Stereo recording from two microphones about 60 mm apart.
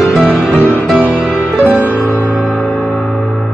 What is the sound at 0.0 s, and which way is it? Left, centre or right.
Music, centre.